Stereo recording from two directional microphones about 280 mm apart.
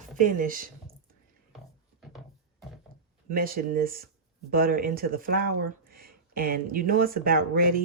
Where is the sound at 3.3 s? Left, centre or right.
Right.